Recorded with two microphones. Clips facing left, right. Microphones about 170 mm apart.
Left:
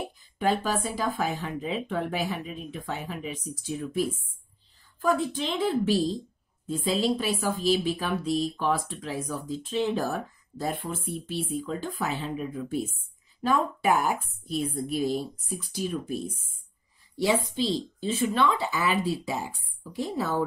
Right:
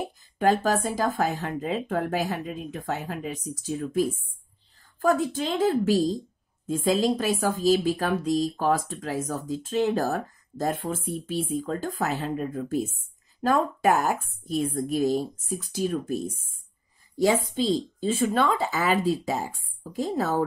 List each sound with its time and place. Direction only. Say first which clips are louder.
0.4 s speech: right 4 dB; 45° right (ahead or behind)
3.4 s speech: right 3 dB; 90° right
5.0 s speech: right 3 dB; 45° right (ahead or behind)